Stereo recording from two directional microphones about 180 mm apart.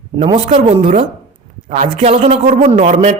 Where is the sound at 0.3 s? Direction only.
30° right (ahead or behind).